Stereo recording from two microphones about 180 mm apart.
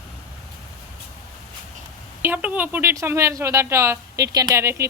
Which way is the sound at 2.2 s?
10° right (ahead or behind).